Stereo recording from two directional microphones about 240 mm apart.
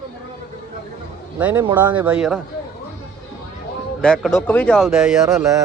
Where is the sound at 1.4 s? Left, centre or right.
Centre.